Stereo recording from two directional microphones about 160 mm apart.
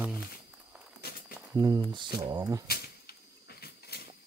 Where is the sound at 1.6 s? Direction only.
20° right (ahead or behind).